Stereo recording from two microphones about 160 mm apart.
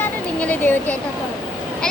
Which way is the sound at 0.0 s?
10° left (ahead or behind).